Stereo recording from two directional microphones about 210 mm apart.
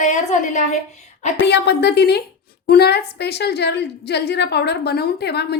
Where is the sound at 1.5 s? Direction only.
55° left (ahead or behind).